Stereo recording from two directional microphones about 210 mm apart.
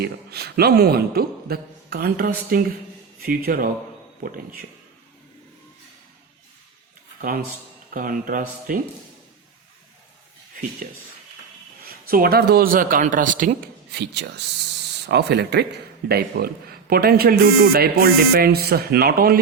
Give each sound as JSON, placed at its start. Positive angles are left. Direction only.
{"t": 0.0, "sound": "a man's voice", "side_deg": -50}
{"t": 7.2, "sound": "speech", "side_deg": -45}
{"t": 11.8, "sound": "speech", "side_deg": -45}
{"t": 14.0, "sound": "a man's voice", "side_deg": -55}